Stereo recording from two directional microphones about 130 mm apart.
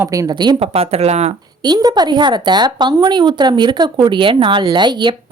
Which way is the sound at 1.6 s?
35° right (ahead or behind).